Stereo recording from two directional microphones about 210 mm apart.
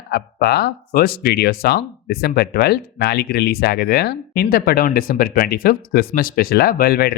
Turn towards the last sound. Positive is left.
turn(degrees=50)  # may be behind; listen again after turning